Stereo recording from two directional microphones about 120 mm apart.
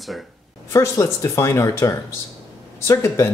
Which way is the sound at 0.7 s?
25° left (ahead or behind).